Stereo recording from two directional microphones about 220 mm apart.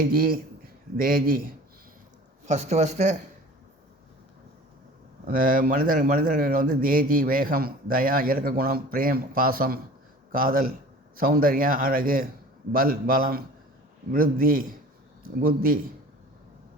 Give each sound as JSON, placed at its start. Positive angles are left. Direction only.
{"t": 0.0, "sound": "speech", "side_deg": -40}
{"t": 2.5, "sound": "a man's voice", "side_deg": -30}
{"t": 5.3, "sound": "a man's voice", "side_deg": -35}